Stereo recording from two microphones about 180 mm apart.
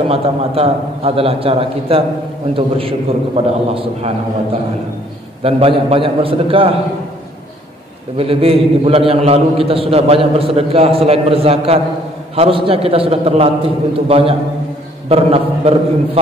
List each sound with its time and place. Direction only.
0.1 s a man's voice: 35° right (ahead or behind)
5.4 s a man's voice: 30° right (ahead or behind)
8.2 s a man's voice: 30° right (ahead or behind)